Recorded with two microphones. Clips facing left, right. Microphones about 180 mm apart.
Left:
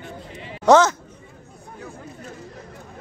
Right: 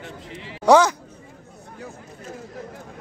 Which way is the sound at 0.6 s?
10° right (ahead or behind).